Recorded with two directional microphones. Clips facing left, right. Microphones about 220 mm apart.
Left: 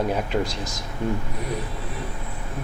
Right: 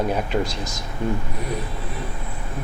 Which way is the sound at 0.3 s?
25° right (ahead or behind).